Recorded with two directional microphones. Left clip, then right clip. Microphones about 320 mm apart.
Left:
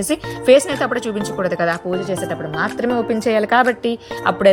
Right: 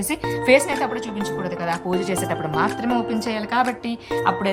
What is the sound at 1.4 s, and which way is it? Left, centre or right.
A woman's voice, centre.